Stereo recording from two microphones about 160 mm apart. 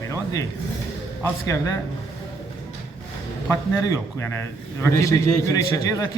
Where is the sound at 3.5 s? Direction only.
20° left (ahead or behind).